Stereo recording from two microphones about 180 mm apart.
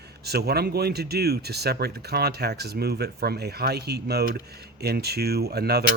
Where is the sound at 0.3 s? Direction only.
60° right (ahead or behind).